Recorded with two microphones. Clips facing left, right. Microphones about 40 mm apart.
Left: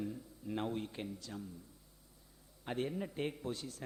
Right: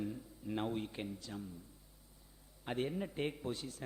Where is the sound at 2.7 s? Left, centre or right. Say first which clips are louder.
Even; centre.